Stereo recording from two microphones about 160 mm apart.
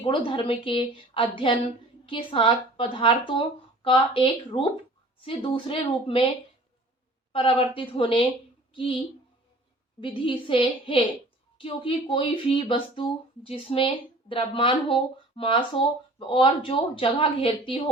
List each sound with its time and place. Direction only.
0.0 s speech: 30° left (ahead or behind)
7.3 s speech: 35° left (ahead or behind)
10.0 s speech: 30° left (ahead or behind)